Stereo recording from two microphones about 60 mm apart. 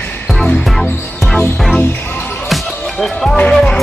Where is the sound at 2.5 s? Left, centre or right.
Centre.